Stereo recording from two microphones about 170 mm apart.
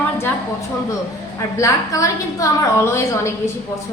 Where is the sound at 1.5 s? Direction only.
20° left (ahead or behind).